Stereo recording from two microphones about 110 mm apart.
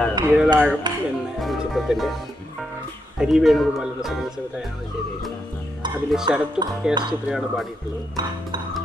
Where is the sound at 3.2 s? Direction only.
Centre (ahead or behind).